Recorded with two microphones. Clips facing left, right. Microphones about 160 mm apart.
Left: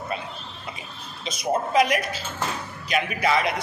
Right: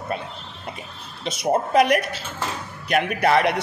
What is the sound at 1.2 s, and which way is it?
A man's voice, 60° right (ahead or behind).